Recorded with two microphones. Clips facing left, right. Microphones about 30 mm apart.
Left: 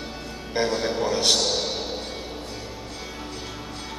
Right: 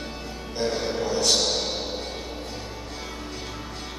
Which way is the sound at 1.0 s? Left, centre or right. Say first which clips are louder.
Left 1 dB; left.